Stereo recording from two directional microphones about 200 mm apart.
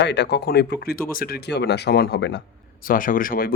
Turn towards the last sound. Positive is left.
turn(degrees=45)  # may be behind; listen again after turning